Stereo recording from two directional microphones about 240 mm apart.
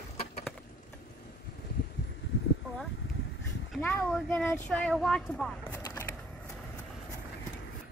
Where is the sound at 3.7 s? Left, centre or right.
Centre.